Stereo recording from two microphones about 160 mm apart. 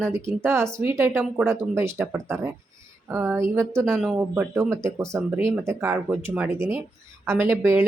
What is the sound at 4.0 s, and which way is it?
Speech, 10° right (ahead or behind).